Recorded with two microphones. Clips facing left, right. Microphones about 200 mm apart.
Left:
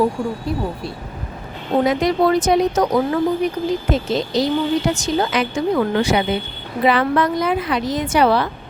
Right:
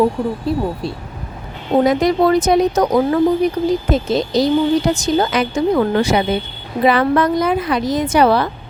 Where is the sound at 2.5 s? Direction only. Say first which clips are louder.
Right 2 dB; 45° right (ahead or behind).